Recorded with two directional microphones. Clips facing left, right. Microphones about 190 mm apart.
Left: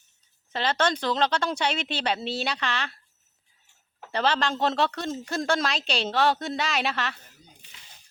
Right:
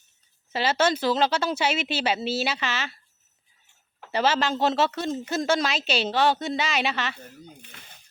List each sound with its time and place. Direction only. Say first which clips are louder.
0.5 s speech: right 2 dB; 5° right (ahead or behind)
4.1 s speech: right 2 dB; 5° right (ahead or behind)
7.6 s a sound: right 6 dB; 55° right (ahead or behind)